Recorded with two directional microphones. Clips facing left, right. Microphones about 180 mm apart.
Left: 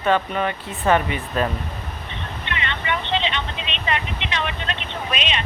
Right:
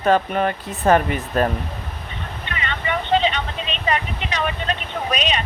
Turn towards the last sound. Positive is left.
turn(degrees=-40)  # may be behind; listen again after turning